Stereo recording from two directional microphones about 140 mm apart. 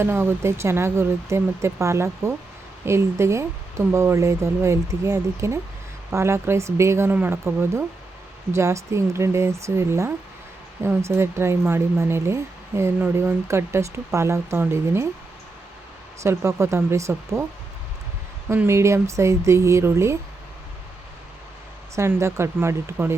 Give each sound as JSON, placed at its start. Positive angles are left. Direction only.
{"t": 0.0, "sound": "speech", "side_deg": -15}
{"t": 16.2, "sound": "speech", "side_deg": -20}
{"t": 18.4, "sound": "speech", "side_deg": -20}
{"t": 21.9, "sound": "speech", "side_deg": -20}